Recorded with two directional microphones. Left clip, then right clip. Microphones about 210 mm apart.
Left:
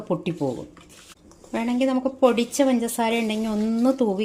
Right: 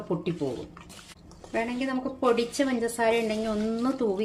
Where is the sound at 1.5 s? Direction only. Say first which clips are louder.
Left 6 dB; 35° left (ahead or behind).